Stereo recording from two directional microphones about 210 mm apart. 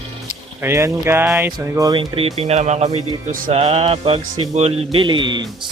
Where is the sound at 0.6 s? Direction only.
15° right (ahead or behind).